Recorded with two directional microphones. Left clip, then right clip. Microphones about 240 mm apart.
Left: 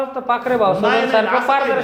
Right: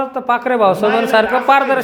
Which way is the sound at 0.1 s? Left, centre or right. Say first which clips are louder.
Right 2 dB; right.